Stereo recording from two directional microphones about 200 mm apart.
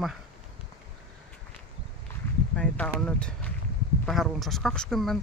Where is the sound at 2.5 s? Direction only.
5° left (ahead or behind).